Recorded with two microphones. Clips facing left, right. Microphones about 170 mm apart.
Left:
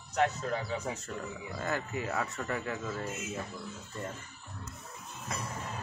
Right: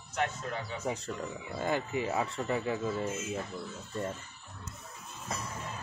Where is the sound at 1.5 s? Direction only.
25° right (ahead or behind).